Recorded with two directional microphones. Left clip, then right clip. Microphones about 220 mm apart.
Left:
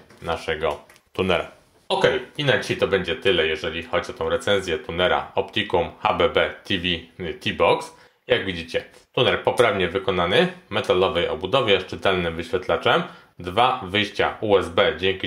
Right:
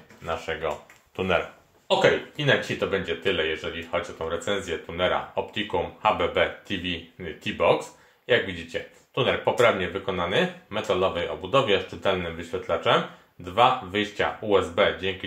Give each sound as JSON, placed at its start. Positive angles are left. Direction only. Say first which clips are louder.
{"t": 0.2, "sound": "speech", "louder": "left 5 dB", "side_deg": 45}